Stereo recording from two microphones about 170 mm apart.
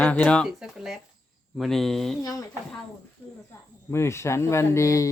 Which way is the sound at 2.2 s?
20° left (ahead or behind).